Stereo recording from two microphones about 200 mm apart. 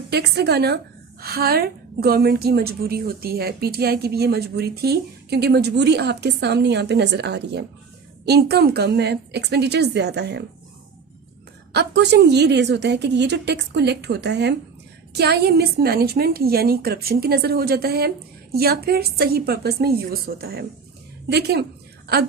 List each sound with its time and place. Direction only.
0.1 s a woman's voice: 55° right (ahead or behind)
11.7 s a woman's voice: 60° right (ahead or behind)
22.0 s a sound: 50° right (ahead or behind)